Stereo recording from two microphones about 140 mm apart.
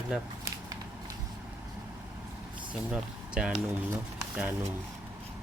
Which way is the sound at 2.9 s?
5° right (ahead or behind).